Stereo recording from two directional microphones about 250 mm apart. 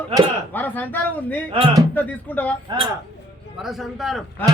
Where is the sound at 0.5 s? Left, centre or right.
Centre.